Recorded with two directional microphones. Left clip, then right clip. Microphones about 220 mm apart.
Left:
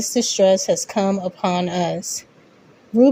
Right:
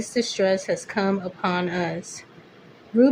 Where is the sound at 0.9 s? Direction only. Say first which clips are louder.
Left 4 dB; 25° left (ahead or behind).